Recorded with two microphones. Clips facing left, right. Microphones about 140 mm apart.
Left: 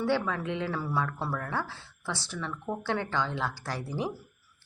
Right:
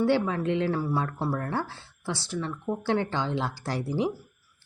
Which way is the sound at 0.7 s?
20° right (ahead or behind).